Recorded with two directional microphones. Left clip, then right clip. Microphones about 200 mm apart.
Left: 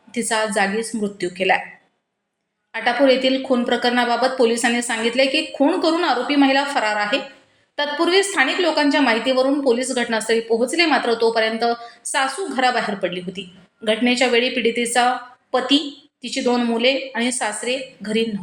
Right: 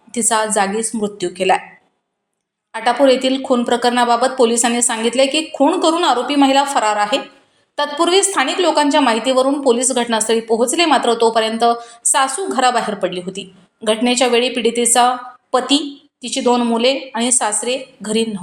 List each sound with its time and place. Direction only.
0.1 s a woman's voice: 25° right (ahead or behind)
2.7 s a woman's voice: 30° right (ahead or behind)